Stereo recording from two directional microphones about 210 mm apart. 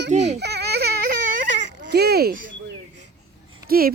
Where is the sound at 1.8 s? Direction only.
50° right (ahead or behind).